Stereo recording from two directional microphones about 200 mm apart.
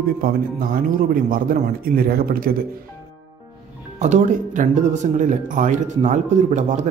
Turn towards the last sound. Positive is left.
turn(degrees=-35)  # may be behind; listen again after turning